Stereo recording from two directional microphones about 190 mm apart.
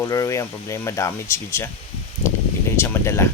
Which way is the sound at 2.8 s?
15° left (ahead or behind).